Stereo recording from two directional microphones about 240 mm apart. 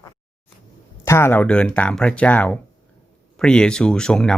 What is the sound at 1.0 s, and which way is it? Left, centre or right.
Speech, centre.